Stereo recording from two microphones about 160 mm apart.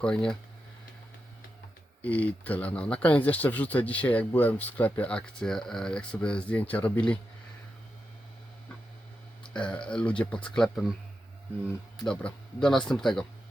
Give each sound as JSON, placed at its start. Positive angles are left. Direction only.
{"t": 0.0, "sound": "speech", "side_deg": 5}
{"t": 2.0, "sound": "speech", "side_deg": 10}
{"t": 9.5, "sound": "speech", "side_deg": 5}